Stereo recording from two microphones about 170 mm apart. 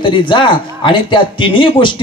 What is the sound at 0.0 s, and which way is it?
A man's voice, 30° left (ahead or behind).